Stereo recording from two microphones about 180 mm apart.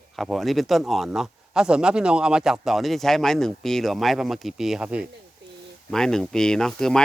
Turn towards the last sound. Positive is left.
turn(degrees=0)  # may be behind; listen again after turning